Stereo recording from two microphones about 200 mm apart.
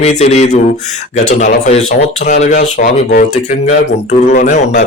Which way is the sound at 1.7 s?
35° left (ahead or behind).